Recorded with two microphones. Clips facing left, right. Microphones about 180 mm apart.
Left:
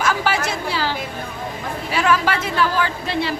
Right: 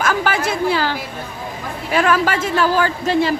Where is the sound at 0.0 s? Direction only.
50° right (ahead or behind).